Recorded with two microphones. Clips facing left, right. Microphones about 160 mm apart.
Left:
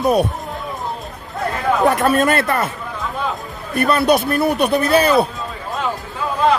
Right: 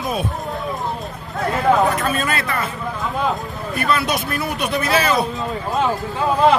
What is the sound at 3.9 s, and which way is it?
Speech, 45° left (ahead or behind).